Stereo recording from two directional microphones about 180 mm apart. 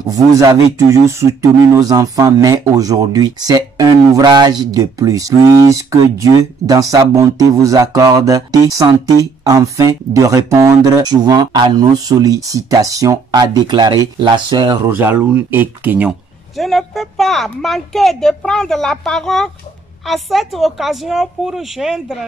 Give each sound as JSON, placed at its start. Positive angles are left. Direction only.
{"t": 0.1, "sound": "speech", "side_deg": -20}
{"t": 14.9, "sound": "speech", "side_deg": -10}